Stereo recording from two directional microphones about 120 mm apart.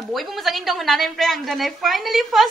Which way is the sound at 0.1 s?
Centre (ahead or behind).